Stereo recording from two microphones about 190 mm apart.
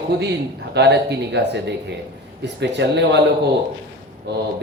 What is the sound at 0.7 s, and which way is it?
Speech, 65° right (ahead or behind).